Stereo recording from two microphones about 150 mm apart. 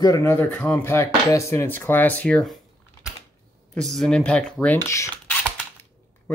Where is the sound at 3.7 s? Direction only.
Centre (ahead or behind).